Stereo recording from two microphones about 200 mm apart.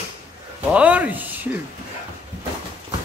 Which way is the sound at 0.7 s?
5° right (ahead or behind).